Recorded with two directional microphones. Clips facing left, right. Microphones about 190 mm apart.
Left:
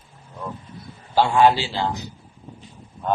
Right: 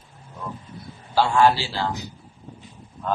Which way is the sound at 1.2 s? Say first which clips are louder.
Left 2 dB; 15° left (ahead or behind).